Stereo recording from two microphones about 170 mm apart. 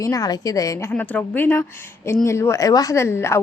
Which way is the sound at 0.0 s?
20° left (ahead or behind).